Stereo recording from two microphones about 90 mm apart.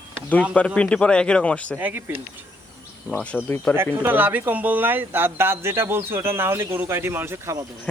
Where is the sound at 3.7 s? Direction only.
25° right (ahead or behind).